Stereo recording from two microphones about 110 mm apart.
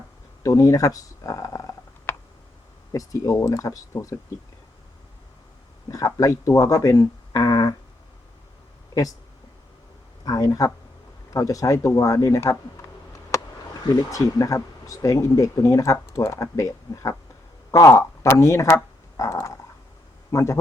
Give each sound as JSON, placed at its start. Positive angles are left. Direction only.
{"t": 0.4, "sound": "speech", "side_deg": 30}
{"t": 2.9, "sound": "speech", "side_deg": 30}
{"t": 5.9, "sound": "speech", "side_deg": 30}
{"t": 10.2, "sound": "speech", "side_deg": 35}
{"t": 13.8, "sound": "a man's voice", "side_deg": 35}